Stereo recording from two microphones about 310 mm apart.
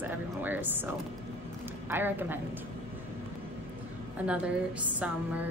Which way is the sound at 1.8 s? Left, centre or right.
Centre.